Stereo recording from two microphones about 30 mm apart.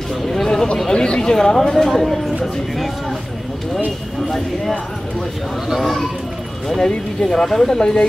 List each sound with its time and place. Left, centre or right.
0.1 s a sound: centre
0.8 s chatter: left
1.3 s speech: centre
5.8 s speech: centre
6.8 s speech: left
7.4 s speech: centre
7.7 s speech: left